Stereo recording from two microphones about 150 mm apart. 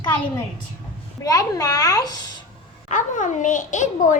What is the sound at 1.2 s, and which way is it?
Speech, 25° left (ahead or behind).